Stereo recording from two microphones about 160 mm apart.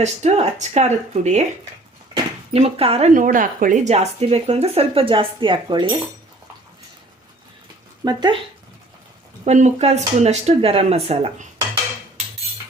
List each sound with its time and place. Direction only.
0.0 s speech: 45° right (ahead or behind)
2.5 s speech: 40° right (ahead or behind)
3.1 s speech: 55° right (ahead or behind); by 6.0 s 30° right (ahead or behind)
8.0 s speech: 25° right (ahead or behind)
9.4 s speech: 45° right (ahead or behind)